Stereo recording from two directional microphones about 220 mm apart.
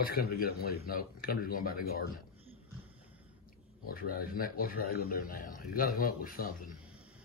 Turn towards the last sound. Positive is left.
turn(degrees=40)  # may be behind; listen again after turning